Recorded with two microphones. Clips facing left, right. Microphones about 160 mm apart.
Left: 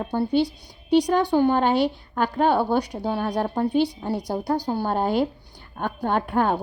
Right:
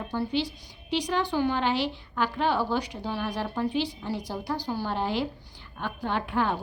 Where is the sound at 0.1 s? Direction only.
50° left (ahead or behind).